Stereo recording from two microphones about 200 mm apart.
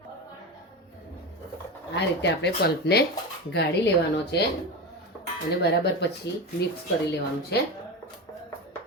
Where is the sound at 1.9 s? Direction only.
60° left (ahead or behind).